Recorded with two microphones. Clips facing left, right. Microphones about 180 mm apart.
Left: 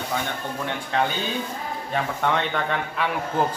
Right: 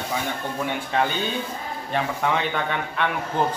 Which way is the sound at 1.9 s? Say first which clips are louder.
Even; centre (ahead or behind).